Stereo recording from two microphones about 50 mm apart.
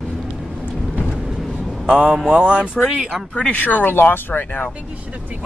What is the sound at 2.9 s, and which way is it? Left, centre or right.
Speech, centre.